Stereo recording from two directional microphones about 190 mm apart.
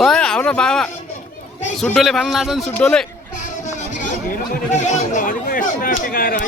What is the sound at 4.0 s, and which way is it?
Speech, 40° left (ahead or behind).